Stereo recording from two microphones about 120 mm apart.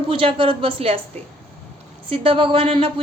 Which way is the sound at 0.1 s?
45° right (ahead or behind).